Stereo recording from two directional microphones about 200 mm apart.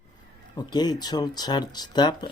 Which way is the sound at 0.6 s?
20° left (ahead or behind).